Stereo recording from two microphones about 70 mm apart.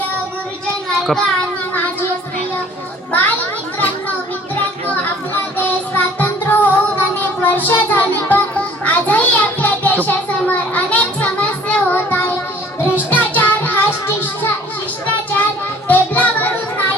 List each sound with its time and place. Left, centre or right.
0.9 s a sound: centre
3.1 s children playing: left
4.9 s music: left
7.7 s children playing: left
10.1 s a sound: left
12.9 s music: left
15.9 s music: left